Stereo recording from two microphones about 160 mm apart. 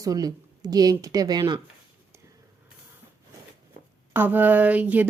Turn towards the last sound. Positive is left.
turn(degrees=-10)  # may be behind; listen again after turning